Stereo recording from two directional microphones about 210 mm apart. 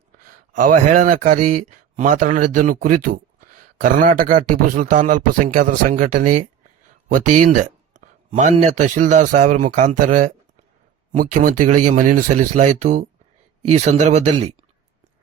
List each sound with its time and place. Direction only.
0.2 s speech: 40° right (ahead or behind)